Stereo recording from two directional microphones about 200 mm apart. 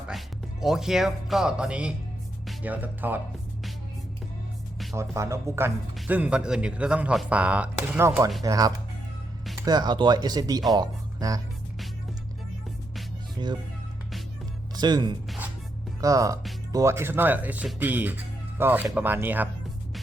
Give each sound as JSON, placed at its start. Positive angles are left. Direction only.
{"t": 0.1, "sound": "speech", "side_deg": 0}
{"t": 4.9, "sound": "speech", "side_deg": -15}
{"t": 13.4, "sound": "speech", "side_deg": -25}
{"t": 14.8, "sound": "speech", "side_deg": -20}